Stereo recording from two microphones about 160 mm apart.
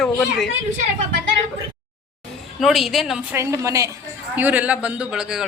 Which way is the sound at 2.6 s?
Centre (ahead or behind).